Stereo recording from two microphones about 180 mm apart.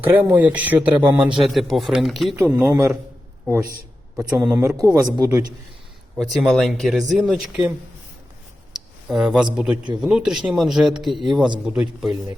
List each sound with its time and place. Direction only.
0.2 s speech: 10° right (ahead or behind)
1.0 s a man's voice: 25° right (ahead or behind)
1.4 s speech: centre (ahead or behind)
2.3 s speech: 10° right (ahead or behind)
4.2 s a man's voice: 20° right (ahead or behind)
6.1 s speech: centre (ahead or behind)
9.0 s speech: centre (ahead or behind)